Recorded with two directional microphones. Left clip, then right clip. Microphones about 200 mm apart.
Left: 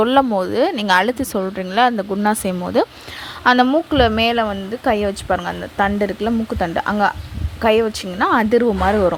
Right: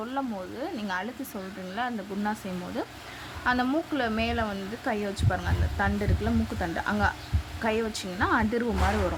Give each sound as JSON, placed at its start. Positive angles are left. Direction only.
{"t": 0.0, "sound": "a woman's voice", "side_deg": 50}